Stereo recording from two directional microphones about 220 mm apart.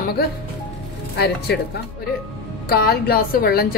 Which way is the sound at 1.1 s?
45° left (ahead or behind).